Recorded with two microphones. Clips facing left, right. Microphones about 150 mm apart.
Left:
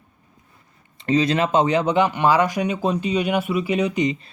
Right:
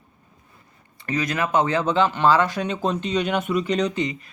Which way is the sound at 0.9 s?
25° left (ahead or behind).